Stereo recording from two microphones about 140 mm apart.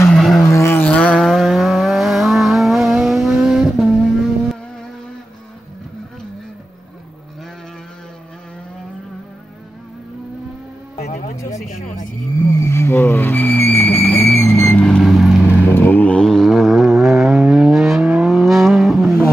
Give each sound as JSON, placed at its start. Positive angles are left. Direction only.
{"t": 0.1, "sound": "vehicle", "side_deg": 0}
{"t": 0.5, "sound": "vehicle", "side_deg": 20}
{"t": 11.7, "sound": "music", "side_deg": 65}
{"t": 12.4, "sound": "a sound", "side_deg": 20}
{"t": 15.6, "sound": "vehicle", "side_deg": 15}